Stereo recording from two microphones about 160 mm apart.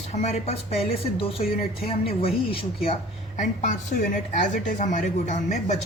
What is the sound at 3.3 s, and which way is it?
A woman's voice, 50° left (ahead or behind).